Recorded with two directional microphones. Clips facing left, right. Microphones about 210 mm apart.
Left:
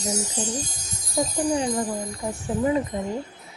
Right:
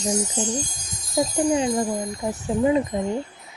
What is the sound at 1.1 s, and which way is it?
Speech, 20° right (ahead or behind).